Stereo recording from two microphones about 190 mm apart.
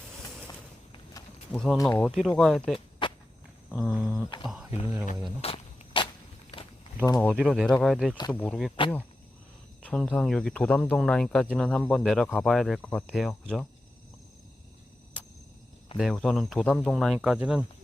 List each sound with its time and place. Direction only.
1.2 s a sound: 20° left (ahead or behind)
1.5 s speech: 5° left (ahead or behind)
2.0 s speech: centre (ahead or behind)
3.0 s walk: 25° left (ahead or behind)
3.7 s speech: centre (ahead or behind)
5.4 s a sound: 30° left (ahead or behind)
7.2 s speech: centre (ahead or behind)
9.8 s speech: 5° left (ahead or behind)
16.0 s speech: centre (ahead or behind)